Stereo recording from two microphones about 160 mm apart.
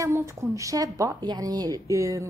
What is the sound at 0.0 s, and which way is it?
A woman's voice, 20° right (ahead or behind).